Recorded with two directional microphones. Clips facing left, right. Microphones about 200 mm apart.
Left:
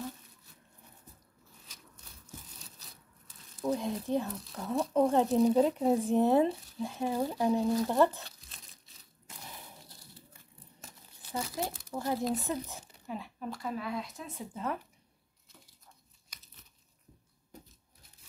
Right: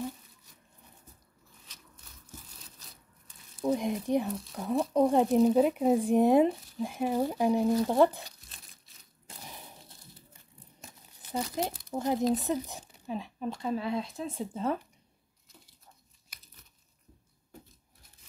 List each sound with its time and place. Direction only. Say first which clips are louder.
3.6 s speech: right 3 dB; 15° right (ahead or behind)
9.3 s a sound: right 2 dB; 30° right (ahead or behind)
11.3 s speech: right 3 dB; 20° right (ahead or behind)